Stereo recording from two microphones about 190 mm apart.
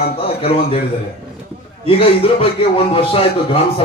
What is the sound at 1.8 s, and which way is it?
A man's voice, 30° left (ahead or behind).